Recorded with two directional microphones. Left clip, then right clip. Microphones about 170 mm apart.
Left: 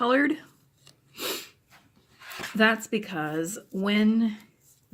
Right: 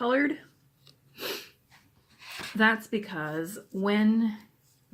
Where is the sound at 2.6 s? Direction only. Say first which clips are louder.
Left 2 dB; 50° left (ahead or behind).